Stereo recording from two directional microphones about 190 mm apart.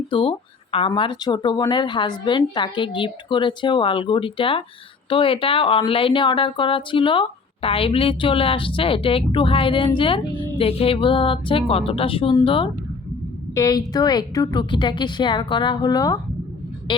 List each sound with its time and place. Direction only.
0.1 s speech: 25° left (ahead or behind)